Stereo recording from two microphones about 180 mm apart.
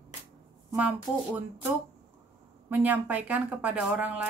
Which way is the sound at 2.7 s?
10° right (ahead or behind).